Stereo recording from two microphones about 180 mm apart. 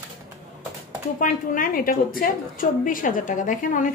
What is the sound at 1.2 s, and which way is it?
A woman's voice, 50° left (ahead or behind).